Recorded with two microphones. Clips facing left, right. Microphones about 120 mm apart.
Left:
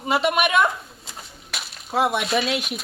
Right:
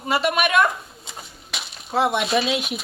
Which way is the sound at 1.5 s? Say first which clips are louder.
Right 1 dB; 5° left (ahead or behind).